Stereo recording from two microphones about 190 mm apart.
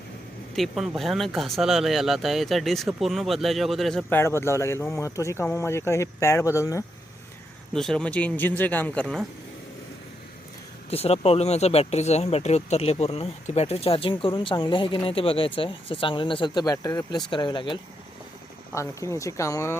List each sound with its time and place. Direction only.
0.5 s speech: centre (ahead or behind)
4.2 s speech: 15° left (ahead or behind)
7.7 s speech: 5° left (ahead or behind)
10.8 s speech: 30° left (ahead or behind)
18.7 s speech: 15° left (ahead or behind)